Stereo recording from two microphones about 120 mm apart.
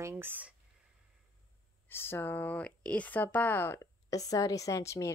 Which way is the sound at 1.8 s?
20° left (ahead or behind).